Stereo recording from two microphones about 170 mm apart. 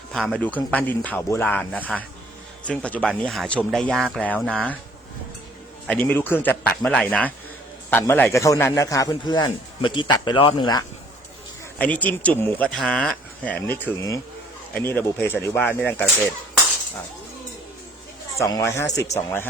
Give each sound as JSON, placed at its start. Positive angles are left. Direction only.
{"t": 0.1, "sound": "speech", "side_deg": 5}
{"t": 5.9, "sound": "a man's voice", "side_deg": 10}
{"t": 11.8, "sound": "speech", "side_deg": 10}
{"t": 18.3, "sound": "speech", "side_deg": 20}